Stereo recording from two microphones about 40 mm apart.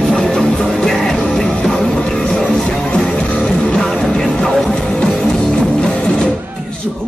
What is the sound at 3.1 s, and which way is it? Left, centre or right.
Music, left.